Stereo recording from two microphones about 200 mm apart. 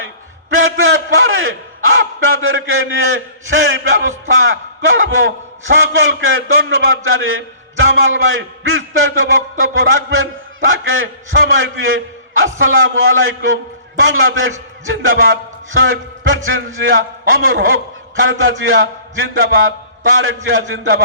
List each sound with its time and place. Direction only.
0.5 s a man's voice: 85° right